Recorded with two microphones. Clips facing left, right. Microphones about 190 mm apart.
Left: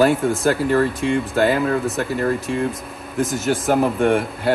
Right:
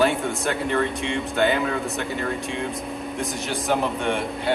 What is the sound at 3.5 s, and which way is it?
Speech, 50° left (ahead or behind).